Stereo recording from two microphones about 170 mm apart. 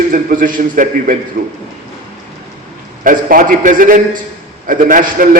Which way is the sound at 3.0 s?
55° right (ahead or behind).